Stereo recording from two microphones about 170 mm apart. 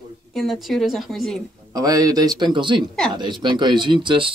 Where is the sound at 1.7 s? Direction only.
20° right (ahead or behind).